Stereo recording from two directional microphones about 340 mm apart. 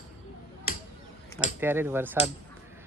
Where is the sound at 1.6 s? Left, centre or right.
Centre.